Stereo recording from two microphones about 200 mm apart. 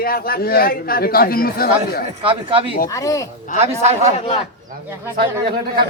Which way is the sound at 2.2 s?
25° right (ahead or behind).